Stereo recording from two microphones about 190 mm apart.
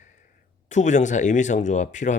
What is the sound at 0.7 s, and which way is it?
Speech, 40° left (ahead or behind).